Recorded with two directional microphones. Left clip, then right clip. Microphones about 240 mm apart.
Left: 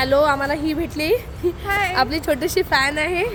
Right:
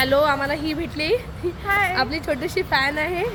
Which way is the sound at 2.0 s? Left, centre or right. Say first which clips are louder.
Left 3 dB; left.